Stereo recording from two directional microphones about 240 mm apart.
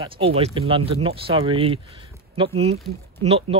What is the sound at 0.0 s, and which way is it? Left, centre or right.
Speech, right.